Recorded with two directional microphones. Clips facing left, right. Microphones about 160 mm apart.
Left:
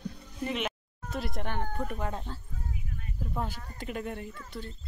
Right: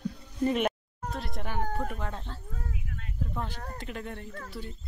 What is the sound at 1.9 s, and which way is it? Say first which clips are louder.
Speech: left 2 dB; 10° left (ahead or behind).